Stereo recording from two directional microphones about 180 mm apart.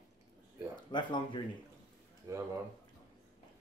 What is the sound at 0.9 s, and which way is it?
Speech, 25° left (ahead or behind).